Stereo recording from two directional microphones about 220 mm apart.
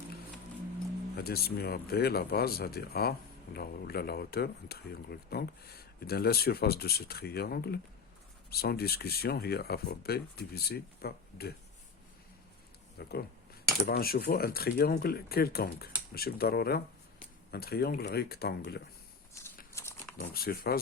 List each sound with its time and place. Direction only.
1.1 s speech: 45° left (ahead or behind)
13.0 s speech: 45° left (ahead or behind)
19.8 s a sound: 15° left (ahead or behind)
20.3 s speech: 45° left (ahead or behind)